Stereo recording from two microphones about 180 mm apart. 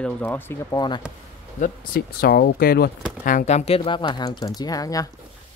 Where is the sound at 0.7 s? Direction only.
25° left (ahead or behind).